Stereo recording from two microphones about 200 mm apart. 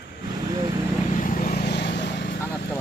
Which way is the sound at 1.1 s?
40° left (ahead or behind).